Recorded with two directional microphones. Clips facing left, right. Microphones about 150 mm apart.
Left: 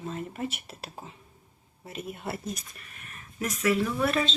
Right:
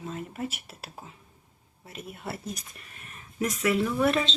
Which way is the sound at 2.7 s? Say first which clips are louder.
Even; 30° right (ahead or behind).